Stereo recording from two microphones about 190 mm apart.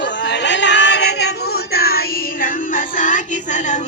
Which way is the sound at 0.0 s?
65° left (ahead or behind).